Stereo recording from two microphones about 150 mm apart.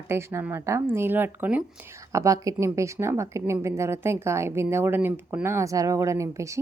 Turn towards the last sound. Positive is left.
turn(degrees=-20)  # may be behind; listen again after turning